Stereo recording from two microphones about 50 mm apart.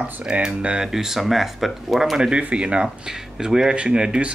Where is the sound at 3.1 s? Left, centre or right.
Centre.